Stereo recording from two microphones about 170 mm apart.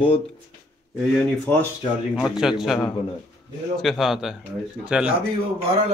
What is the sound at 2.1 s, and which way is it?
Speech, centre (ahead or behind).